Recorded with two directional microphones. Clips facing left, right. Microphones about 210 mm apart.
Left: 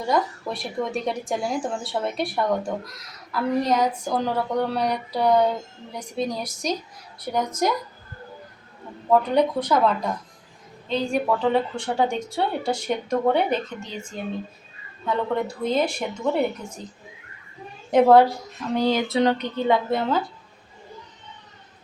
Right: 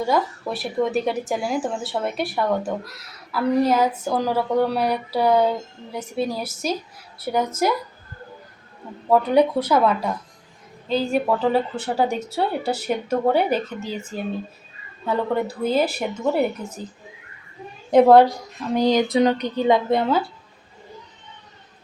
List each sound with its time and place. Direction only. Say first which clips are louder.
0.0 s a woman's voice: right 2 dB; 5° right (ahead or behind)
9.0 s a woman's voice: right 2 dB; 10° right (ahead or behind)
17.9 s a woman's voice: right 2 dB; 15° right (ahead or behind)